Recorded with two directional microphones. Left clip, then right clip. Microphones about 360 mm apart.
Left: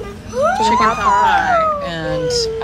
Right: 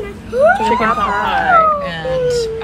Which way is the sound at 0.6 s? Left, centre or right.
Centre.